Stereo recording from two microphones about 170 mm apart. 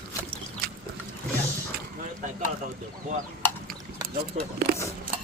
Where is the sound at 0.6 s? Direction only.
65° right (ahead or behind).